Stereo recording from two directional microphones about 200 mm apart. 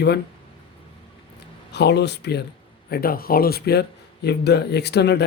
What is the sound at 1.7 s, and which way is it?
Speech, 55° left (ahead or behind).